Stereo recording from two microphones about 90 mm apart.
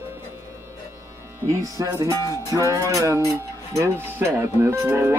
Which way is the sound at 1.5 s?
40° right (ahead or behind).